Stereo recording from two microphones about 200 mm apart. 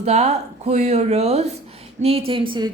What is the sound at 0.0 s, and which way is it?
A woman's voice, 30° right (ahead or behind).